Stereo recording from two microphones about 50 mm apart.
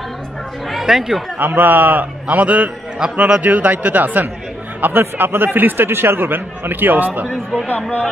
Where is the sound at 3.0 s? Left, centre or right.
Centre.